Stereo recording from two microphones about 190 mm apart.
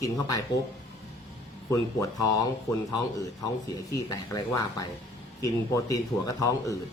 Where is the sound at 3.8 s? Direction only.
15° left (ahead or behind).